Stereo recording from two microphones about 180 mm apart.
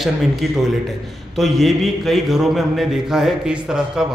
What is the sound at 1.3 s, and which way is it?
A man's voice, centre (ahead or behind).